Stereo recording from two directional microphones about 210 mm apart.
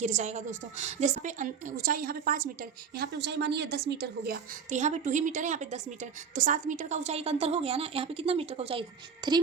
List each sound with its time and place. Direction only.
0.0 s a woman's voice: 35° right (ahead or behind)
4.7 s a woman's voice: 35° right (ahead or behind)